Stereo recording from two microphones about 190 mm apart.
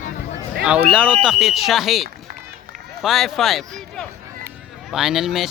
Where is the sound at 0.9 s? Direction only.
5° right (ahead or behind).